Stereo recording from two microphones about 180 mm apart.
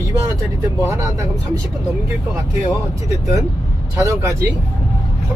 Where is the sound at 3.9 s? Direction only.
15° right (ahead or behind).